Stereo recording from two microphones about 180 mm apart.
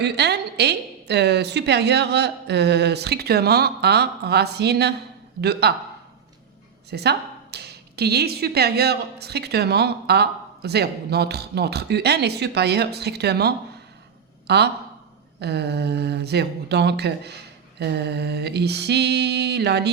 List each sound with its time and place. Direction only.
0.0 s a woman's voice: 65° right (ahead or behind)
6.9 s a woman's voice: 65° right (ahead or behind)